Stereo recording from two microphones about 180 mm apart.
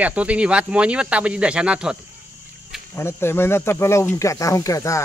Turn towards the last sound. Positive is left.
turn(degrees=15)  # may be behind; listen again after turning